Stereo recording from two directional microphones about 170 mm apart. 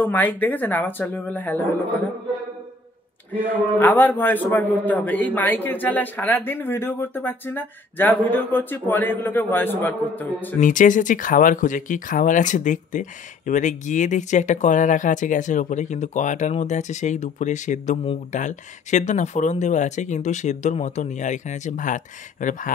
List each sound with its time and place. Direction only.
0.0 s a man's voice: 10° left (ahead or behind)
3.5 s a man's voice: 10° left (ahead or behind)
10.6 s speech: 50° left (ahead or behind)